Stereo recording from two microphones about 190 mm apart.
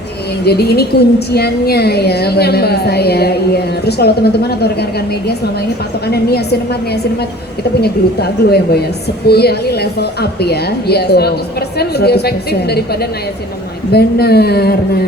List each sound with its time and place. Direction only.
0.4 s a woman's voice: 55° left (ahead or behind)